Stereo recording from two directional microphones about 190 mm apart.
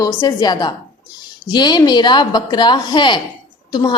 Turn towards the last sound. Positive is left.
turn(degrees=20)  # may be behind; listen again after turning